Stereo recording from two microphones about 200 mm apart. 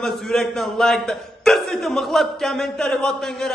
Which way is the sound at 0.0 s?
Centre (ahead or behind).